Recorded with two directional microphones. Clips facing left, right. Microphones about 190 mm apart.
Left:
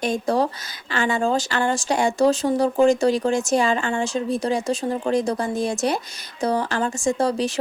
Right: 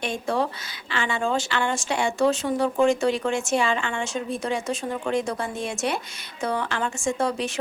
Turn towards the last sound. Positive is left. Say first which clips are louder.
# left 4 dB
turn(degrees=35)  # may be behind; listen again after turning